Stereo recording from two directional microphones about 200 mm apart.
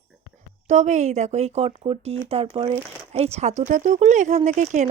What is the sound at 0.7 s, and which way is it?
Speech, 35° right (ahead or behind).